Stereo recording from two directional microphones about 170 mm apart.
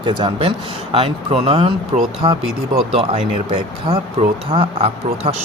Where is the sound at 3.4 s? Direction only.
30° right (ahead or behind).